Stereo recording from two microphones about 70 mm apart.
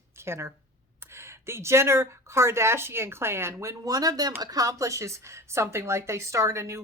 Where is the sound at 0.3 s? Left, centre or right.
Right.